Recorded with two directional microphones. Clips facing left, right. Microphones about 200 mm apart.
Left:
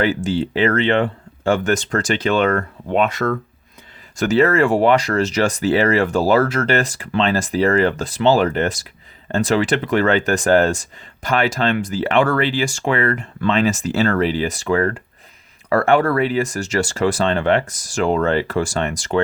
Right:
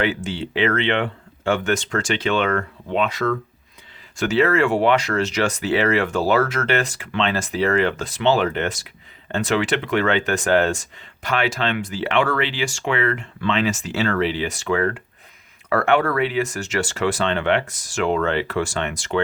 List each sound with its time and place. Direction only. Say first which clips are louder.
0.0 s speech: left 5 dB; 40° left (ahead or behind)